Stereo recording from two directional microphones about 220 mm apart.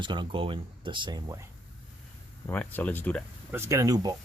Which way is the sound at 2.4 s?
10° left (ahead or behind).